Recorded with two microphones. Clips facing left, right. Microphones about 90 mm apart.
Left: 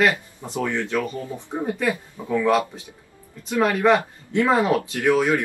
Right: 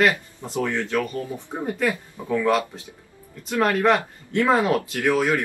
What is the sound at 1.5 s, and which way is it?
Speech, 10° left (ahead or behind).